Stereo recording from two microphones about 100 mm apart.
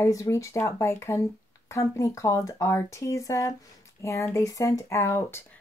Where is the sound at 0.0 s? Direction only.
30° left (ahead or behind).